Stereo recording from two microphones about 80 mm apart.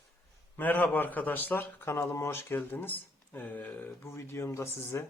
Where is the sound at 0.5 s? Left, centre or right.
Left.